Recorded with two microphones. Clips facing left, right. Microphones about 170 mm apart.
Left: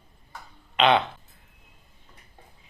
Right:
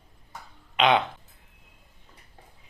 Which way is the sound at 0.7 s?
10° right (ahead or behind).